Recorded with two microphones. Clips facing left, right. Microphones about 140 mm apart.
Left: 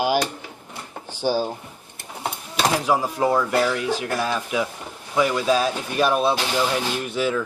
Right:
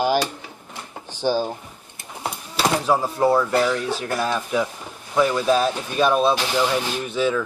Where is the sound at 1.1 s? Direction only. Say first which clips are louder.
Right 1 dB; 10° left (ahead or behind).